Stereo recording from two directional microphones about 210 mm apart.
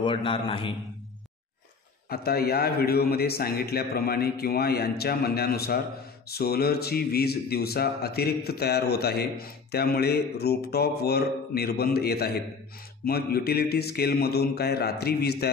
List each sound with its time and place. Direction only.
0.0 s a man's voice: 25° left (ahead or behind)
2.0 s speech: 45° left (ahead or behind)